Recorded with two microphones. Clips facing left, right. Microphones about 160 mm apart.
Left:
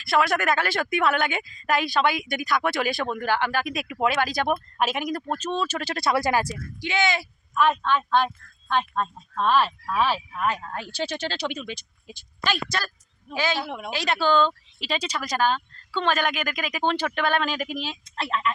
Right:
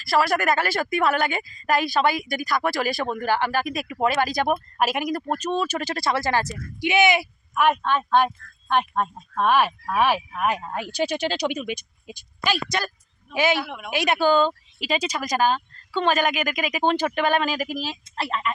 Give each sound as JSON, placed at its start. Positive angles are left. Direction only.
{"t": 0.0, "sound": "a woman's voice", "side_deg": 0}
{"t": 6.1, "sound": "speech", "side_deg": 15}
{"t": 6.8, "sound": "a man's voice", "side_deg": -20}
{"t": 13.6, "sound": "speech", "side_deg": 30}
{"t": 13.9, "sound": "a woman's voice", "side_deg": -15}